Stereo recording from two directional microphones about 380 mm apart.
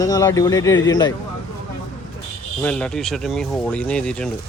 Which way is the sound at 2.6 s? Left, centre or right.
Centre.